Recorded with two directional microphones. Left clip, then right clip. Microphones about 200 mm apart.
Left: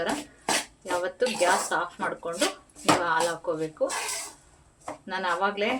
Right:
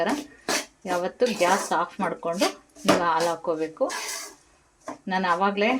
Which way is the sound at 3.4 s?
35° right (ahead or behind).